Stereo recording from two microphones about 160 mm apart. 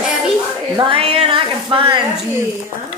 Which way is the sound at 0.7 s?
30° right (ahead or behind).